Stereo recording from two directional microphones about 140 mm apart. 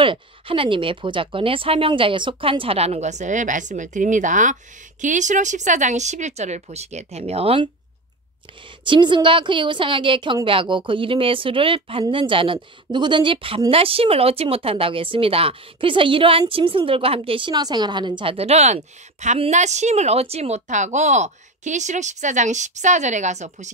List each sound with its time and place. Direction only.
0.0 s a woman's voice: 40° right (ahead or behind)
8.8 s a woman's voice: 35° right (ahead or behind); by 23.7 s 55° right (ahead or behind)